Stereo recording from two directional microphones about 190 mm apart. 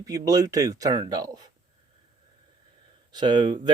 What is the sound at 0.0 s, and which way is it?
Speech, 20° right (ahead or behind).